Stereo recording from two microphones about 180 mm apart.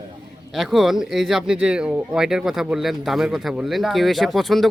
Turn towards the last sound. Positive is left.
turn(degrees=0)  # may be behind; listen again after turning